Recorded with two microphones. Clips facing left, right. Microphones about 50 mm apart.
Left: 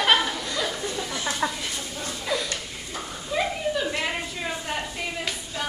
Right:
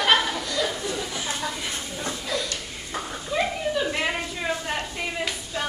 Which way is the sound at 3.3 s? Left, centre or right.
Centre.